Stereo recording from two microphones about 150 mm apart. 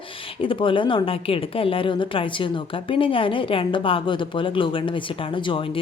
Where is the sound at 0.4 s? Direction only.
35° left (ahead or behind).